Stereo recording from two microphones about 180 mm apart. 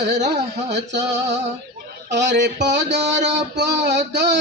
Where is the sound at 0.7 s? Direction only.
75° right (ahead or behind).